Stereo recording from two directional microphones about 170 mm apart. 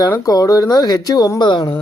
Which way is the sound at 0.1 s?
20° left (ahead or behind).